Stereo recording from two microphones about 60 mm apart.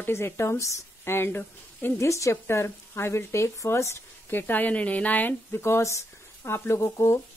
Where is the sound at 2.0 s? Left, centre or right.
Left.